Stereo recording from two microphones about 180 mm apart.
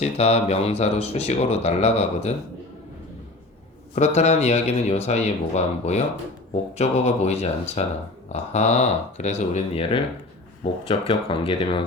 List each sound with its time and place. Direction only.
0.0 s speech: 35° left (ahead or behind)
3.9 s speech: 35° left (ahead or behind)